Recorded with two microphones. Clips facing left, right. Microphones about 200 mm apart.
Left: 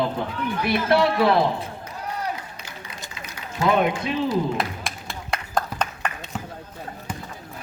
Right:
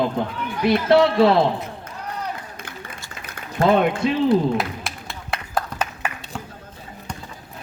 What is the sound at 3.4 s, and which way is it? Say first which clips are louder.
A man's voice: right 3 dB; 55° right (ahead or behind).